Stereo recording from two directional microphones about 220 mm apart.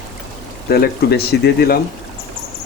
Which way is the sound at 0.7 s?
45° left (ahead or behind).